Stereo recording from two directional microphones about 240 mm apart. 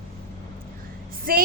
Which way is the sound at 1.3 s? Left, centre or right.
Right.